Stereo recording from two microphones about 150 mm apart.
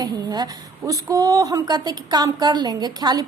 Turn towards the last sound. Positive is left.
turn(degrees=-25)  # may be behind; listen again after turning